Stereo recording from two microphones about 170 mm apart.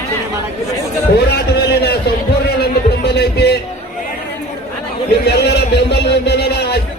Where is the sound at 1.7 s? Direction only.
70° left (ahead or behind).